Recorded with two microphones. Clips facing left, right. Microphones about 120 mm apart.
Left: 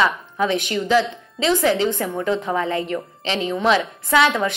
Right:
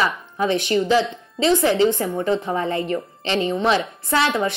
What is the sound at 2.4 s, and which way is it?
Speech, 90° left.